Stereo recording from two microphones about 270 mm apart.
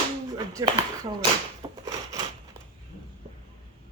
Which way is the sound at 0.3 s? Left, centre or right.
Centre.